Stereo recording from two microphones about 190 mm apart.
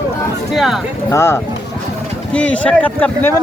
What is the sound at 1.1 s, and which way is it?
Speech, 15° left (ahead or behind).